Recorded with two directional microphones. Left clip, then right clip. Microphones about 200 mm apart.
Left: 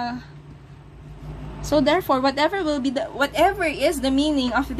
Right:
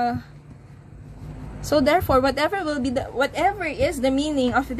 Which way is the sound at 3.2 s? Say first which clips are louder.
Left 3 dB; 10° right (ahead or behind).